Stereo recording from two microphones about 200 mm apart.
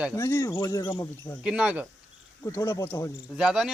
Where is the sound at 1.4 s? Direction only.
5° right (ahead or behind).